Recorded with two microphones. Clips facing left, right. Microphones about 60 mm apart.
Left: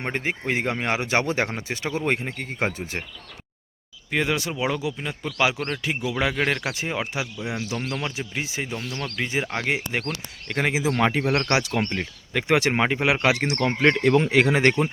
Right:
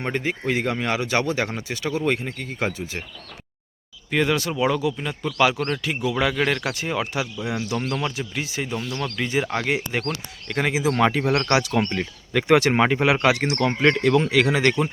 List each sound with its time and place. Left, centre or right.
0.0 s speech: left
4.1 s speech: centre
7.8 s speech: centre
8.1 s speech: left
8.9 s speech: centre
10.0 s speech: centre
10.7 s speech: centre
11.7 s speech: centre; by 14.8 s left